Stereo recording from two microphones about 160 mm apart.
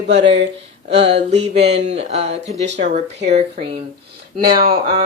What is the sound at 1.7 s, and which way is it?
Speech, 40° right (ahead or behind).